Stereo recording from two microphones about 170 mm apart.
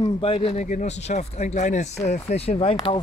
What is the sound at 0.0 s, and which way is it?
A man's voice, 35° left (ahead or behind).